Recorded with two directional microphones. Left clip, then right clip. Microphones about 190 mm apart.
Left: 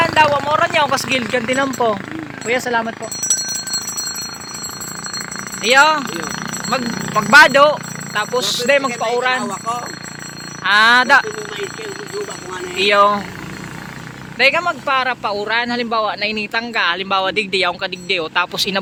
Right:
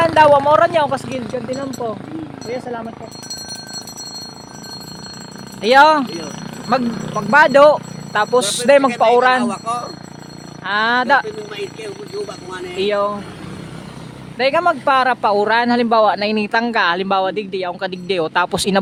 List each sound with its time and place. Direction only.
0.0 s speech: 30° right (ahead or behind)
1.5 s speech: 10° left (ahead or behind)
5.6 s speech: 30° right (ahead or behind)
7.3 s speech: 15° right (ahead or behind)
7.5 s speech: 35° right (ahead or behind)
12.7 s speech: 25° right (ahead or behind)
14.3 s speech: 25° right (ahead or behind)
14.6 s speech: 35° right (ahead or behind); by 17.7 s 15° right (ahead or behind)
17.7 s speech: 30° right (ahead or behind)